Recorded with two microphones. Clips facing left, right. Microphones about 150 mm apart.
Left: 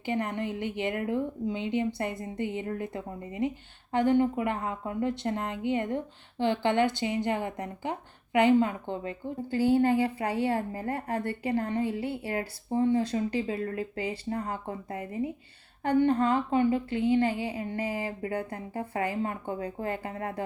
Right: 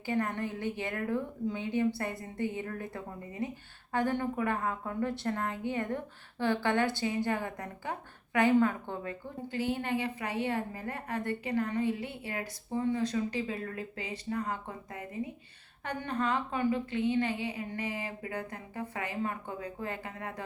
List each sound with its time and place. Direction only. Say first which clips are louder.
0.0 s a woman's voice: left 2 dB; 20° left (ahead or behind)